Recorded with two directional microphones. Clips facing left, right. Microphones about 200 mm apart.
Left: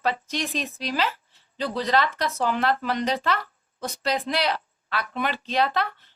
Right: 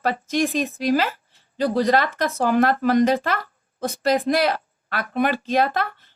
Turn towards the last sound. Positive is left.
turn(degrees=-45)  # may be behind; listen again after turning